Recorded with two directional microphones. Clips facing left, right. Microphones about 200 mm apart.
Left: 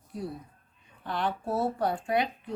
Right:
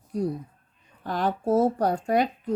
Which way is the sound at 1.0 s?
40° right (ahead or behind).